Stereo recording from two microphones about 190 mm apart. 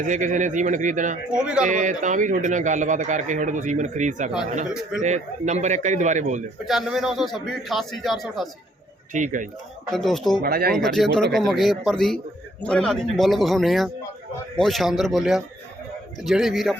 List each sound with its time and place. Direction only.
0.0 s a man's voice: 40° right (ahead or behind)
1.3 s a man's voice: 5° right (ahead or behind)
1.6 s a man's voice: 40° right (ahead or behind)
6.7 s a man's voice: centre (ahead or behind)
9.1 s a man's voice: 40° right (ahead or behind)
9.9 s a man's voice: centre (ahead or behind)
10.4 s speech: 55° right (ahead or behind)
10.8 s a man's voice: centre (ahead or behind)